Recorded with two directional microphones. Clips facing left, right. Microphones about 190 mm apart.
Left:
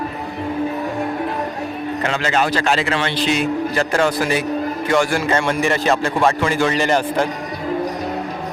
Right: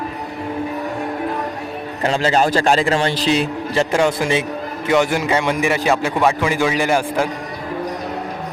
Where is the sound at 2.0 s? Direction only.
35° right (ahead or behind); by 7.2 s 10° right (ahead or behind).